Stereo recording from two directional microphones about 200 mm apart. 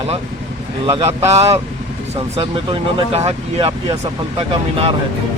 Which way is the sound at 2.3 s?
25° right (ahead or behind).